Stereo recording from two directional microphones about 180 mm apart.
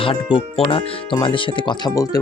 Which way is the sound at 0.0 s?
30° left (ahead or behind).